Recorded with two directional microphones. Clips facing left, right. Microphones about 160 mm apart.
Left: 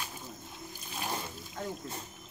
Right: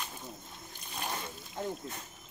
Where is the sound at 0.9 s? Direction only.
Centre (ahead or behind).